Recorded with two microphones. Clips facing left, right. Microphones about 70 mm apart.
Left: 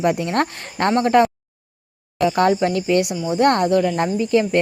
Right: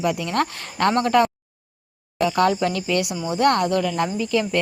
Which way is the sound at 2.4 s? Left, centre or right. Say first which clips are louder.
Left 2 dB; left.